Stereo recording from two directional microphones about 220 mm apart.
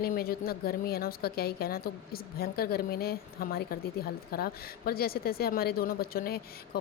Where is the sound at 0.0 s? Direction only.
45° left (ahead or behind).